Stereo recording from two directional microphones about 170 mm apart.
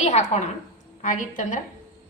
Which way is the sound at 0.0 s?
40° left (ahead or behind).